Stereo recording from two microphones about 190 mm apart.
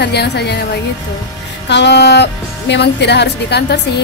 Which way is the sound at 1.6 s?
65° left (ahead or behind).